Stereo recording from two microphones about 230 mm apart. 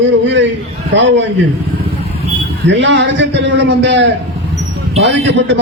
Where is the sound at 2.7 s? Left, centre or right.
Right.